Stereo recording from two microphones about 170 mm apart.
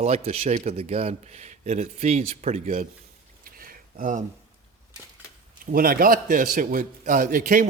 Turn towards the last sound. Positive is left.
turn(degrees=-50)  # may be behind; listen again after turning